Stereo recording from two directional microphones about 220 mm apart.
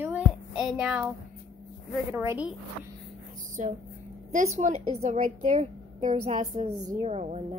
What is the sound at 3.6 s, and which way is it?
A woman's voice, 35° right (ahead or behind).